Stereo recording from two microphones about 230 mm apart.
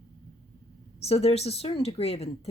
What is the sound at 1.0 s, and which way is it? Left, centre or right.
Speech, left.